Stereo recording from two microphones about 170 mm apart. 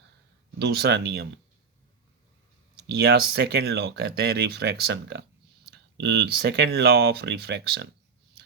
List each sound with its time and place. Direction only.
0.6 s speech: 75° right (ahead or behind)
3.1 s speech: 70° right (ahead or behind)
6.0 s speech: 75° right (ahead or behind)